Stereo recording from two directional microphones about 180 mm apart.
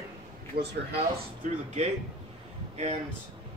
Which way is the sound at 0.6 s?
60° right (ahead or behind).